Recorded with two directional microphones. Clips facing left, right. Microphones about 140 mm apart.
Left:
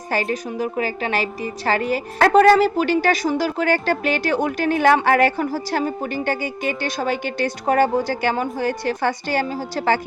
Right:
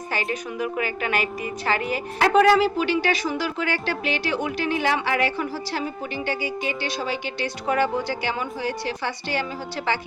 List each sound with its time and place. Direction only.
0.1 s a woman's voice: 45° left (ahead or behind)